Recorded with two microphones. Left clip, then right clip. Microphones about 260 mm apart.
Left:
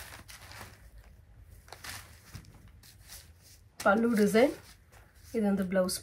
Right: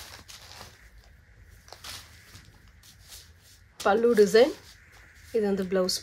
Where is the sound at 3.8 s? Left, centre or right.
Right.